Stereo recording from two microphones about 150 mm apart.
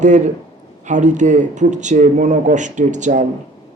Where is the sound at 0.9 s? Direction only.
55° right (ahead or behind).